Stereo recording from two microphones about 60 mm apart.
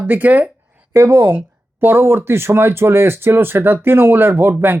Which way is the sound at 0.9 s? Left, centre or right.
Right.